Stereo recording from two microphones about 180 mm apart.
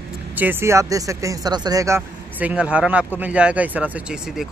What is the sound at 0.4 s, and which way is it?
Speech, 10° right (ahead or behind).